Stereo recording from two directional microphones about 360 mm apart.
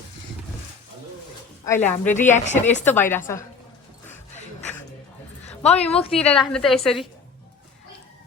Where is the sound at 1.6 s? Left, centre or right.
Centre.